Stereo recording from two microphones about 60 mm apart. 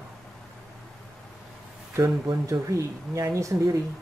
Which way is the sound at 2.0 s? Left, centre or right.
Right.